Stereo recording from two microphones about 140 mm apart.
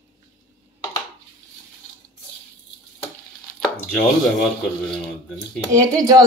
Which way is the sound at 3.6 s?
10° left (ahead or behind).